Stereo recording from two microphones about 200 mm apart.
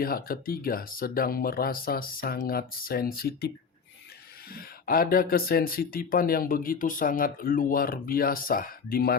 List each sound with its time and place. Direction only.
0.0 s speech: 50° left (ahead or behind)
4.5 s speech: 50° left (ahead or behind)